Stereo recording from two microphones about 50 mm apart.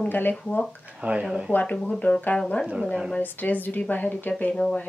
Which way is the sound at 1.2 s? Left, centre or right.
Centre.